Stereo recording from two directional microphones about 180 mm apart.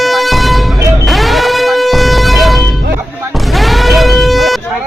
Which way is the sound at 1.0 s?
Centre (ahead or behind).